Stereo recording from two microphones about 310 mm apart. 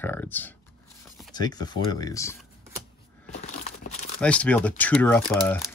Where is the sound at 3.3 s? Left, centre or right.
Left.